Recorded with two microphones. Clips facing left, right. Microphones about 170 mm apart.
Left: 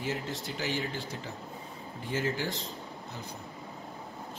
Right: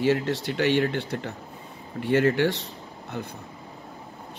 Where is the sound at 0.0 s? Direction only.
75° right (ahead or behind).